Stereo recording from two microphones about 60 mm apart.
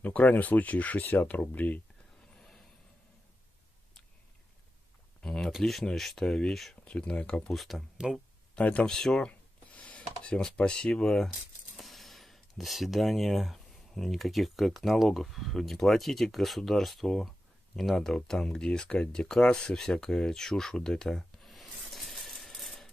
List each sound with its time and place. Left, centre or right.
0.0 s speech: left
2.3 s a sound: centre
5.2 s a sound: centre
5.6 s speech: centre
6.8 s speech: centre
7.4 s speech: centre
8.5 s speech: left
8.8 s speech: centre
9.3 s a sound: left
11.7 s speech: centre